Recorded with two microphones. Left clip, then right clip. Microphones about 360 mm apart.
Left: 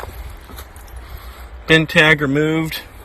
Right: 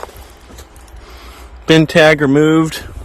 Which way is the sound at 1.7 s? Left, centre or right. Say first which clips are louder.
Right 3 dB; centre.